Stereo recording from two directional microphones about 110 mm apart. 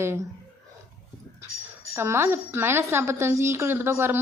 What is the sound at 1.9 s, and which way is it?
A woman's voice, 25° right (ahead or behind).